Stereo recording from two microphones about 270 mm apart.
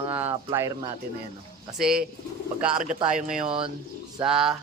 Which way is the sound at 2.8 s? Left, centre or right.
Right.